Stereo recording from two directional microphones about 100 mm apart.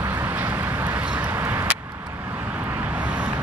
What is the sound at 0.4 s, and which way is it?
Vehicle, 15° right (ahead or behind).